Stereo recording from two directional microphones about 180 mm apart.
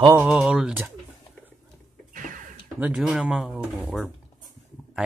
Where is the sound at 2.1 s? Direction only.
50° right (ahead or behind).